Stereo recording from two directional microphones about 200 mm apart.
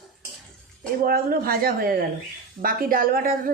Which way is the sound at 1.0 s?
50° right (ahead or behind).